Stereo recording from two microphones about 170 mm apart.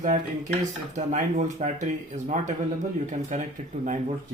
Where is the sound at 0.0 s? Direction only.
50° right (ahead or behind).